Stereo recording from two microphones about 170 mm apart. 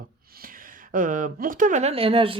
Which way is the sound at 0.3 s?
55° right (ahead or behind).